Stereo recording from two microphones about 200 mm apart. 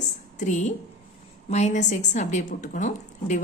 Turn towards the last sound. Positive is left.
turn(degrees=40)  # may be behind; listen again after turning